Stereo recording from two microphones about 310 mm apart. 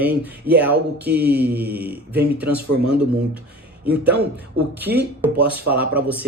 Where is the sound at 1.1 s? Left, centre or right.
Right.